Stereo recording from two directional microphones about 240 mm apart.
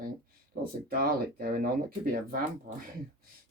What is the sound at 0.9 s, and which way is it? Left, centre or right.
Speech, right.